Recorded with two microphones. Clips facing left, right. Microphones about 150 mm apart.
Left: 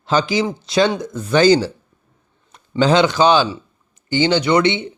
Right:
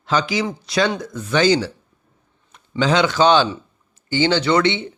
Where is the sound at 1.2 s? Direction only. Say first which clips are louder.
Left 4 dB; 40° left (ahead or behind).